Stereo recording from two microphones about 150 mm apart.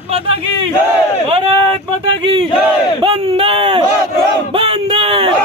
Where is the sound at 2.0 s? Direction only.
35° right (ahead or behind).